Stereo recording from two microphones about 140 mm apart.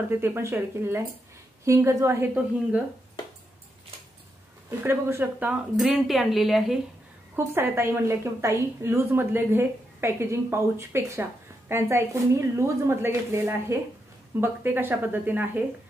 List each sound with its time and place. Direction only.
0.2 s a woman's voice: 15° right (ahead or behind)
4.6 s a woman's voice: 15° right (ahead or behind)
5.5 s speech: 5° right (ahead or behind)
7.3 s a woman's voice: 15° right (ahead or behind)